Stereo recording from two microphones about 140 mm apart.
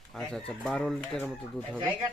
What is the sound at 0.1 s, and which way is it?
Speech, 5° left (ahead or behind).